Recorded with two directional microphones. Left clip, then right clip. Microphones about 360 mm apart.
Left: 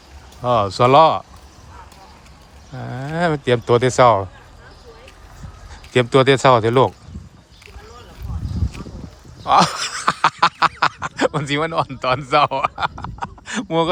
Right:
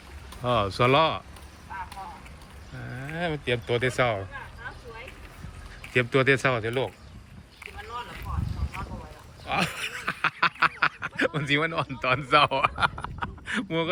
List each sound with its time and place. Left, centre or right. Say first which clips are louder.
0.4 s speech: left 8 dB; centre
3.7 s speech: left 13 dB; centre
5.9 s speech: left 8 dB; centre
9.5 s a sound: left 13 dB; centre